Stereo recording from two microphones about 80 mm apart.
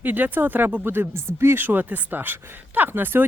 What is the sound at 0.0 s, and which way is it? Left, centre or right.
Speech, right.